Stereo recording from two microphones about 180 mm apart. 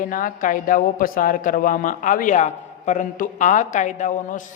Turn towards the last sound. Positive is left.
turn(degrees=45)  # may be behind; listen again after turning